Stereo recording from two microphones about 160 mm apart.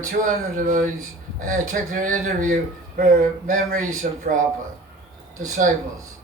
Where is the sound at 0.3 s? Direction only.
55° right (ahead or behind).